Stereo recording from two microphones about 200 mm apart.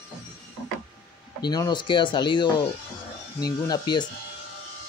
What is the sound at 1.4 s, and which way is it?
Speech, 20° left (ahead or behind).